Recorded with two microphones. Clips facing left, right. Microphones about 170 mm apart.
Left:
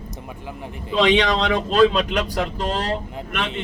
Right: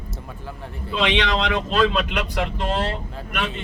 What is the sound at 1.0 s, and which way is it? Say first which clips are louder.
Speech: left 4 dB; 40° left (ahead or behind).